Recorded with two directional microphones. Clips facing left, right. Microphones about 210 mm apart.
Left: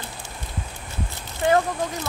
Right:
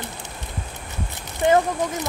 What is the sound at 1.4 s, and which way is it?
Speech, 20° right (ahead or behind).